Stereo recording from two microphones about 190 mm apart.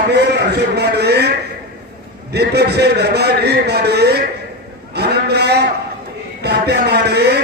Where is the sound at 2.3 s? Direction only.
60° right (ahead or behind).